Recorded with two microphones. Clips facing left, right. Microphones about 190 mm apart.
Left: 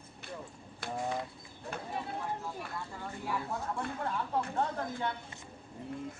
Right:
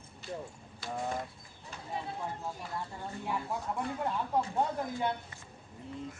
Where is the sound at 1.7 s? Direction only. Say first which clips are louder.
Left 6 dB; 60° left (ahead or behind).